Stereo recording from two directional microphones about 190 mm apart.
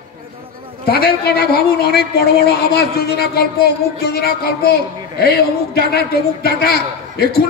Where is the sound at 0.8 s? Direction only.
55° left (ahead or behind).